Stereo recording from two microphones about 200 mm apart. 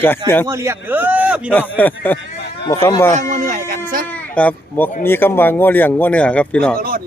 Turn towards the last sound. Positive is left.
turn(degrees=-50)  # may be behind; listen again after turning